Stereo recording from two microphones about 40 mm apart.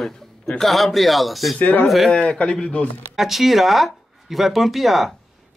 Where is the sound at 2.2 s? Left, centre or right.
Left.